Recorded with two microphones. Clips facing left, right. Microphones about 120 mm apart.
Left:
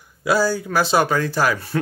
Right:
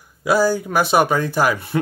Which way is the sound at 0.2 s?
15° right (ahead or behind).